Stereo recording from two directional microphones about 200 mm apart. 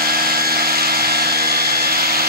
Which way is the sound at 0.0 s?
50° right (ahead or behind).